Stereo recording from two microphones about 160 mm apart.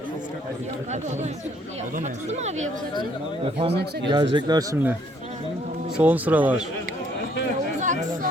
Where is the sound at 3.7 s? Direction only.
90° right.